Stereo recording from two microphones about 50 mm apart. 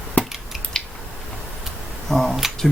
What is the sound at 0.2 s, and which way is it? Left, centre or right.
Scissors, left.